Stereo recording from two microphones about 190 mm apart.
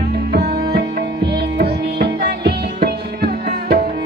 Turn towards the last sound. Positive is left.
turn(degrees=-55)  # may be behind; listen again after turning